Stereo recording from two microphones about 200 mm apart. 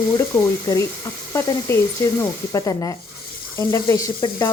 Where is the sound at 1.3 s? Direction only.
10° left (ahead or behind).